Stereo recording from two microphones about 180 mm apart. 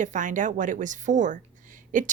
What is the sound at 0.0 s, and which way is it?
A woman's voice, 45° right (ahead or behind).